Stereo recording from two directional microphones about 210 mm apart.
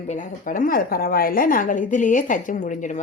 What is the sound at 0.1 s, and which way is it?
A woman's voice, 35° left (ahead or behind).